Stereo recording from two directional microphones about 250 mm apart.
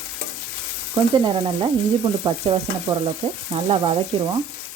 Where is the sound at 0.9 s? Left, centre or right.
Centre.